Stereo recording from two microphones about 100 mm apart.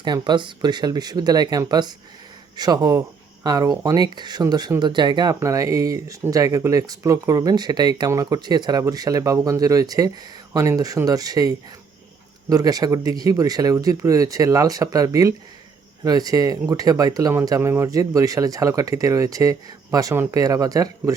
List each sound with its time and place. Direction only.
0.0 s speech: 50° right (ahead or behind)
5.4 s speech: 30° right (ahead or behind)